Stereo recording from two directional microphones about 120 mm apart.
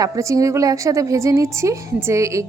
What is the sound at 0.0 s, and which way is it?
A woman's voice, 25° right (ahead or behind).